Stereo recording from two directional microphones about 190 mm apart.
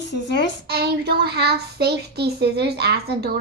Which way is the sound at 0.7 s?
60° right (ahead or behind).